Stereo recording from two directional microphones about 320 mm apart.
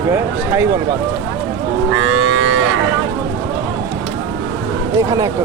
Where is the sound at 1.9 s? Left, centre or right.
Right.